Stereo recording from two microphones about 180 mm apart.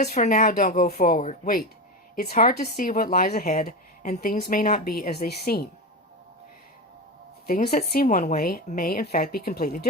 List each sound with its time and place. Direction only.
0.0 s speech: 40° left (ahead or behind)
2.3 s a woman's voice: 55° left (ahead or behind)
7.4 s a woman's voice: 55° left (ahead or behind)